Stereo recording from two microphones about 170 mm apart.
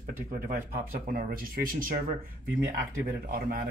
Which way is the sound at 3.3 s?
60° right (ahead or behind).